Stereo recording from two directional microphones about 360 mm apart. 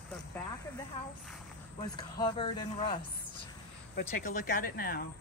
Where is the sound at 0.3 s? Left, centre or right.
Centre; by 5.0 s left.